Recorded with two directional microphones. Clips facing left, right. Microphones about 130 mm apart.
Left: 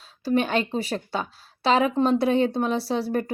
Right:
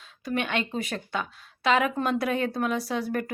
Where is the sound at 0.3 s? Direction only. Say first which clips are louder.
Left 6 dB; 35° left (ahead or behind).